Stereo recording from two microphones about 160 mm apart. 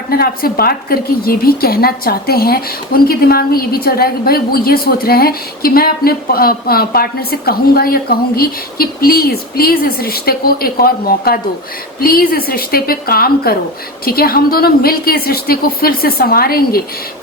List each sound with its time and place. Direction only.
0.1 s a woman's voice: 70° left (ahead or behind)